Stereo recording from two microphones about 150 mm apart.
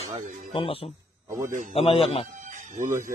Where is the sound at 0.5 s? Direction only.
40° left (ahead or behind).